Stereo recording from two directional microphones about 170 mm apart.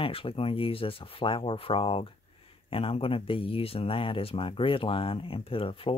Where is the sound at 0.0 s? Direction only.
30° left (ahead or behind).